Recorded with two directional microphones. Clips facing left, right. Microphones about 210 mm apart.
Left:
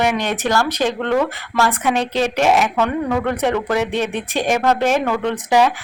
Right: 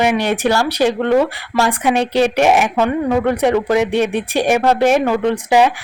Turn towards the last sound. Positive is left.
turn(degrees=-15)  # may be behind; listen again after turning